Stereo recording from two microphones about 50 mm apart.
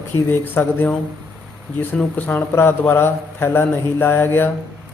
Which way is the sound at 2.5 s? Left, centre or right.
Left.